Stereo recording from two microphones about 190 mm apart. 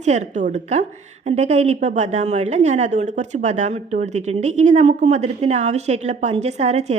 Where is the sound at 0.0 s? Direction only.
35° right (ahead or behind).